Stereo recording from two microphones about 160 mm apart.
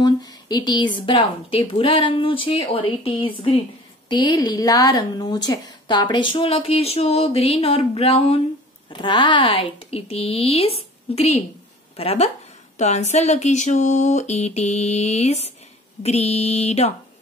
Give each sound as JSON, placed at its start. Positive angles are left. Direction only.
{"t": 0.0, "sound": "a woman's voice", "side_deg": 25}
{"t": 12.7, "sound": "a sound", "side_deg": 45}
{"t": 16.0, "sound": "a woman's voice", "side_deg": 40}